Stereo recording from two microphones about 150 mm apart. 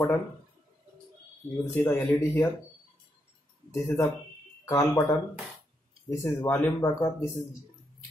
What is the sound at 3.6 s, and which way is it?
Speech, 15° left (ahead or behind).